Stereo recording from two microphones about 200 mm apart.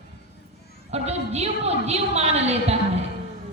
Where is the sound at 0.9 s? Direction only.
30° right (ahead or behind).